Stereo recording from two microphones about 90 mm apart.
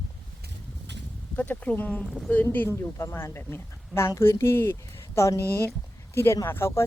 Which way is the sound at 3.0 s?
30° left (ahead or behind).